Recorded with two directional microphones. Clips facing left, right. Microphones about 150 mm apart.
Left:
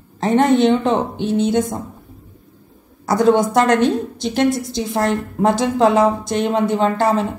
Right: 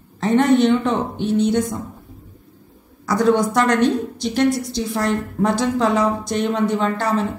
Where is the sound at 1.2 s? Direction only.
90° left.